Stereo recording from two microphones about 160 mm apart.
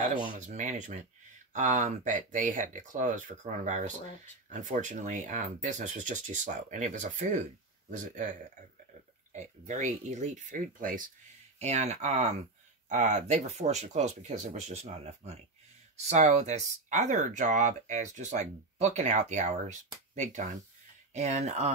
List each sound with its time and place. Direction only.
0.2 s speech: 50° right (ahead or behind)
11.6 s speech: 45° right (ahead or behind)